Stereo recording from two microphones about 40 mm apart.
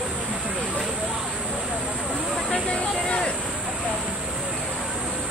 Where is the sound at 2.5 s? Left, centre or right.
Left.